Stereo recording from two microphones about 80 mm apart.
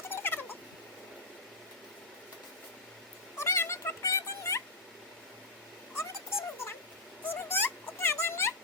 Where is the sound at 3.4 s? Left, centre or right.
Left.